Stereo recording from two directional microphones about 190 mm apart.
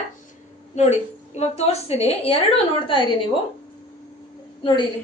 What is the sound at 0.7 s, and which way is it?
A woman's voice, 35° left (ahead or behind).